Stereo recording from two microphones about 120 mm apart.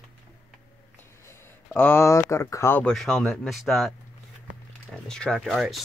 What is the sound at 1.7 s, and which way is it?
Speech, 15° left (ahead or behind).